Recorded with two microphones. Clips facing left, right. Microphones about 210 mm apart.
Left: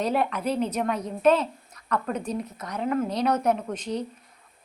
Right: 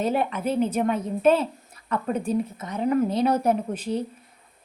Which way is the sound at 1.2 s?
30° right (ahead or behind).